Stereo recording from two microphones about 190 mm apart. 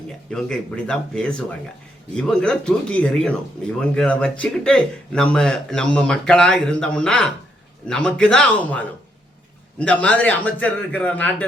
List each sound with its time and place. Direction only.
0.3 s a man's voice: 5° left (ahead or behind)